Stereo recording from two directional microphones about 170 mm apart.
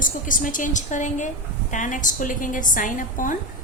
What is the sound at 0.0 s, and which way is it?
A woman's voice, 50° left (ahead or behind).